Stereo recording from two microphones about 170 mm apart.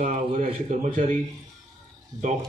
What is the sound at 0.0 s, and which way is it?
A man's voice, 50° right (ahead or behind).